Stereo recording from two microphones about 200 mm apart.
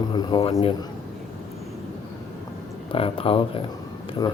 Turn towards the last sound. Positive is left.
turn(degrees=20)  # may be behind; listen again after turning